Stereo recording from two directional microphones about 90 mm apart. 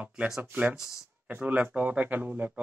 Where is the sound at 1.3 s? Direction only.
20° right (ahead or behind).